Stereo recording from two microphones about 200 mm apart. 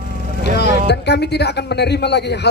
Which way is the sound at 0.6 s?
55° left (ahead or behind).